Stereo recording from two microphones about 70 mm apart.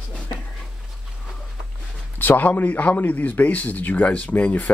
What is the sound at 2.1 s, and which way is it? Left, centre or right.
Speech, left.